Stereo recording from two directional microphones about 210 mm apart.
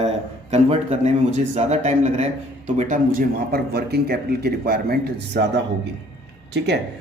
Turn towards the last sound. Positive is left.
turn(degrees=-55)  # may be behind; listen again after turning